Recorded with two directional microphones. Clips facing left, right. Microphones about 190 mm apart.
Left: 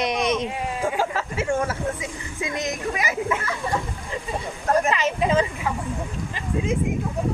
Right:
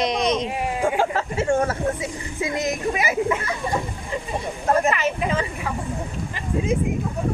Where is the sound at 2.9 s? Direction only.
15° right (ahead or behind).